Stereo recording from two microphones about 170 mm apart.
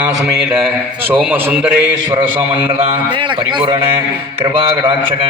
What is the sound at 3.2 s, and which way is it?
Speech, 25° right (ahead or behind).